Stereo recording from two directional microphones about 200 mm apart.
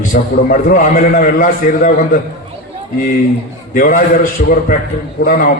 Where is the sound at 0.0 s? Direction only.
40° left (ahead or behind).